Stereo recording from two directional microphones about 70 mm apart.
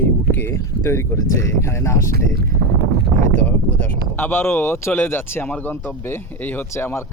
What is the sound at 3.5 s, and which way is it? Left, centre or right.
Speech, left.